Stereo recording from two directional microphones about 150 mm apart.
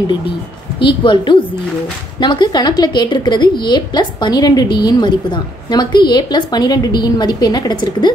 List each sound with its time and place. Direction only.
0.7 s a woman's voice: 35° left (ahead or behind)